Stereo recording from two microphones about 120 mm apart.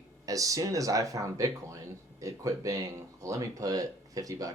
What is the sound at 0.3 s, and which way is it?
Speech, 30° right (ahead or behind).